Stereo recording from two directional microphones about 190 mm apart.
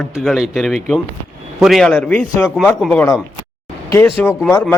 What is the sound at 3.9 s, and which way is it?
Speech, 15° left (ahead or behind).